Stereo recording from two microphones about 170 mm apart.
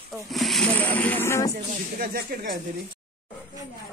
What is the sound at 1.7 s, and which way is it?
Speech, 55° right (ahead or behind).